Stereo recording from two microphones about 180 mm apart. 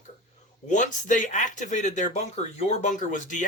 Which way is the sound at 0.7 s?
45° left (ahead or behind).